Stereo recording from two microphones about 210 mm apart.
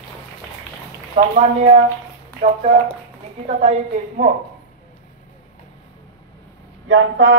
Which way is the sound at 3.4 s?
35° right (ahead or behind).